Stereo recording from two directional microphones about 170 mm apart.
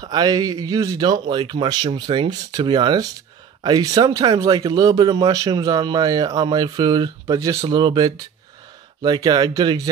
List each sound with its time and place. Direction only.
0.0 s speech: 25° right (ahead or behind)